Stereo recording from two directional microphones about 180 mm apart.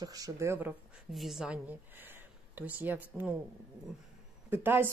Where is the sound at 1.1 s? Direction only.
Centre (ahead or behind).